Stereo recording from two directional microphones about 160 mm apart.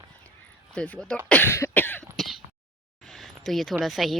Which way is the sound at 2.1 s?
Centre (ahead or behind).